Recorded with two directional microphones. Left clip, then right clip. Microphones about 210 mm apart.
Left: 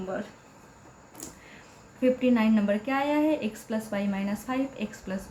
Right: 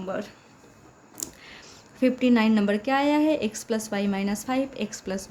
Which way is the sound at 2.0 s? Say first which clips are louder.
Right 2 dB; 45° right (ahead or behind).